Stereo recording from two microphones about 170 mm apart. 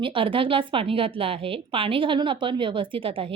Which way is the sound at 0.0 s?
30° right (ahead or behind).